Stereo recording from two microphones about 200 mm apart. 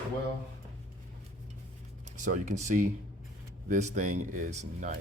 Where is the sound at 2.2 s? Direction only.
40° right (ahead or behind).